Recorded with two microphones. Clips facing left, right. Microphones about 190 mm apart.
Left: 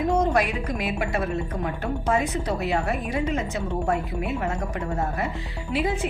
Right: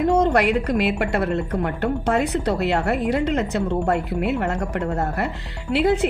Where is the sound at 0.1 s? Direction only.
70° right (ahead or behind).